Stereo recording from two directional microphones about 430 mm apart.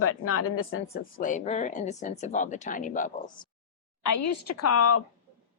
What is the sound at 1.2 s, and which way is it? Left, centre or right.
Speech, centre.